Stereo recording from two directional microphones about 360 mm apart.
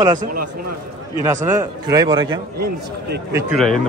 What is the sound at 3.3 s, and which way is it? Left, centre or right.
Speech, centre.